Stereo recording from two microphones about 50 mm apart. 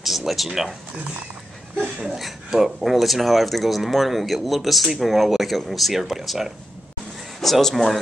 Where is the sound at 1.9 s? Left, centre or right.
Centre.